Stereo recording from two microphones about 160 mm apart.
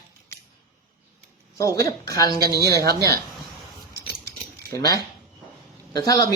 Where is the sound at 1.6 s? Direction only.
20° left (ahead or behind).